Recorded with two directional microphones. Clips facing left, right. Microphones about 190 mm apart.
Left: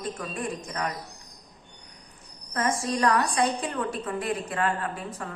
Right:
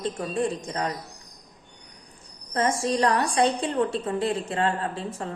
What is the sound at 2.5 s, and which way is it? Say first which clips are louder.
A woman's voice: right 3 dB; 25° right (ahead or behind).